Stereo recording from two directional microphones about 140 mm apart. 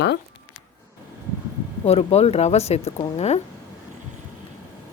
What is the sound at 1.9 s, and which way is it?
Speech, 45° left (ahead or behind).